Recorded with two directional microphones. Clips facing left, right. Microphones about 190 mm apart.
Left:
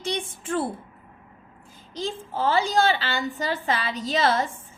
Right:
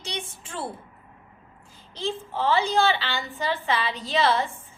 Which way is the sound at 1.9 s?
40° left (ahead or behind).